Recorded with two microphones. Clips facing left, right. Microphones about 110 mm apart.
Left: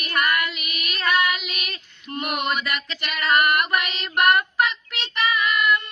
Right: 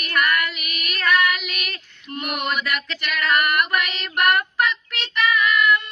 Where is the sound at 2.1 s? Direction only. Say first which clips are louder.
Left 1 dB; 30° left (ahead or behind).